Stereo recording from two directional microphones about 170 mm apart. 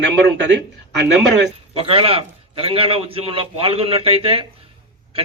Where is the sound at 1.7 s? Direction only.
35° right (ahead or behind).